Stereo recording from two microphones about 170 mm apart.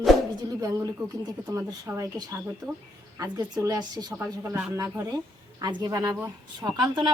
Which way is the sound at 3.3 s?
20° right (ahead or behind).